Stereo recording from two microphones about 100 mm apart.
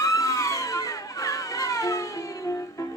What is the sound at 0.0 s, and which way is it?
Police car, 35° left (ahead or behind).